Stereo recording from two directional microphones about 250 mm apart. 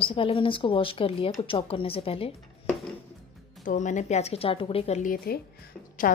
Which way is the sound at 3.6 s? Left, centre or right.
Left.